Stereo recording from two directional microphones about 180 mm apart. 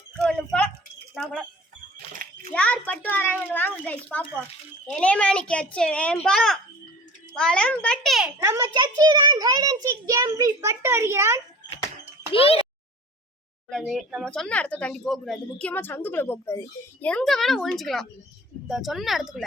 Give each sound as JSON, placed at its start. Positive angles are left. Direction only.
{"t": 0.2, "sound": "a sound", "side_deg": 5}
{"t": 1.1, "sound": "speech", "side_deg": 0}
{"t": 2.5, "sound": "a child's voice", "side_deg": 5}
{"t": 8.4, "sound": "a child's voice", "side_deg": -15}
{"t": 12.3, "sound": "a child's voice", "side_deg": 30}
{"t": 13.7, "sound": "speech", "side_deg": 0}